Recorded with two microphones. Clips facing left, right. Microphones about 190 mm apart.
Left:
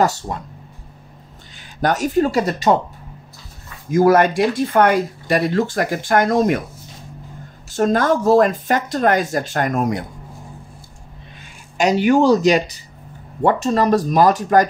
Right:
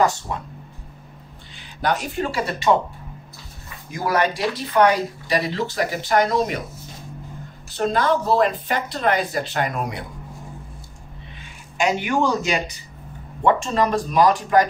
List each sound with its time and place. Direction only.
0.0 s speech: 40° left (ahead or behind)
1.8 s speech: 45° left (ahead or behind)
3.9 s speech: 45° left (ahead or behind)
7.7 s speech: 45° left (ahead or behind)
11.8 s speech: 35° left (ahead or behind)